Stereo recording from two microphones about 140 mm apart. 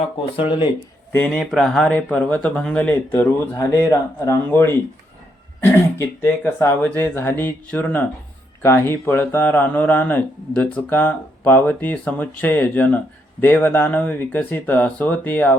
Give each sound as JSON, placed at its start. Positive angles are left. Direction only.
{"t": 0.3, "sound": "speech", "side_deg": 35}
{"t": 1.1, "sound": "speech", "side_deg": 10}
{"t": 3.5, "sound": "speech", "side_deg": 25}